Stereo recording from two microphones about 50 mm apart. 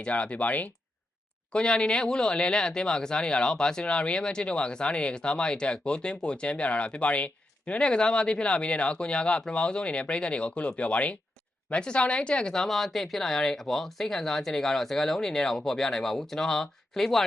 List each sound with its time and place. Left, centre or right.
0.0 s speech: left
1.5 s speech: centre